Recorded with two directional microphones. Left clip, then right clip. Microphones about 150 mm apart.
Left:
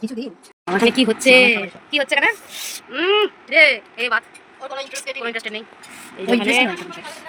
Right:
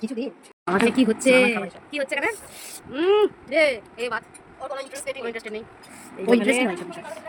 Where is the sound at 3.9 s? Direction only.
5° right (ahead or behind).